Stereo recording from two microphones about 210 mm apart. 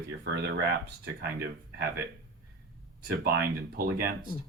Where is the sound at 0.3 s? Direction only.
55° right (ahead or behind).